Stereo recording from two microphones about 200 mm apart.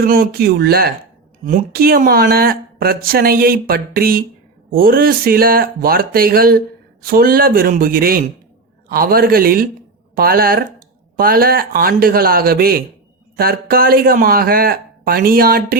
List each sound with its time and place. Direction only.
0.0 s speech: 50° right (ahead or behind)